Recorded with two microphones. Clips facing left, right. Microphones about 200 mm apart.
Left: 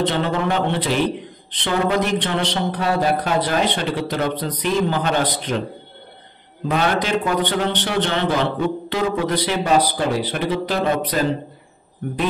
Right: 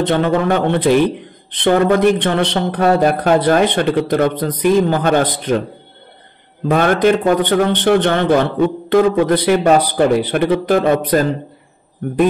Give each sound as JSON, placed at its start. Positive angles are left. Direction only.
{"t": 0.1, "sound": "speech", "side_deg": -55}
{"t": 6.7, "sound": "speech", "side_deg": -50}